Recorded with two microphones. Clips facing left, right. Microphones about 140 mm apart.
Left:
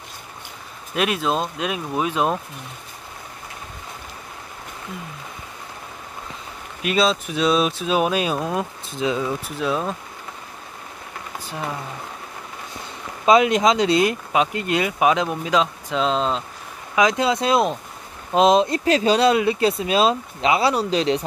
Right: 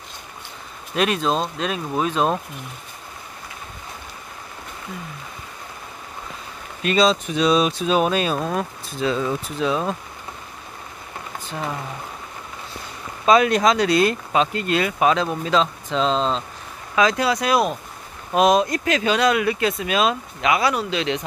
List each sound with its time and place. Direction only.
0.9 s speech: 5° left (ahead or behind)
6.8 s speech: 5° left (ahead or behind)
13.2 s speech: 20° left (ahead or behind)
16.9 s speech: 20° left (ahead or behind); by 21.2 s 35° left (ahead or behind)